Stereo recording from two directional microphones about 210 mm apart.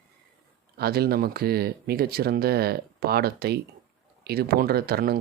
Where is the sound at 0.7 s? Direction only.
50° right (ahead or behind).